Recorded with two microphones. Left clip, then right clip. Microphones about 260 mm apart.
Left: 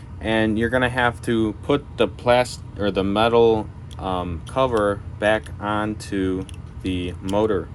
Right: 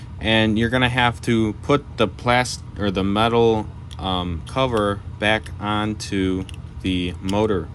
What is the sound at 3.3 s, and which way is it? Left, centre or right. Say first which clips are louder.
Speech: left 3 dB; right.